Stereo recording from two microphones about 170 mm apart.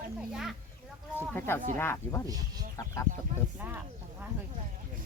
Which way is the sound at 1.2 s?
10° left (ahead or behind).